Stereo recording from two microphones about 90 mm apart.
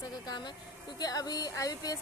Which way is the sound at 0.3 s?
55° left (ahead or behind).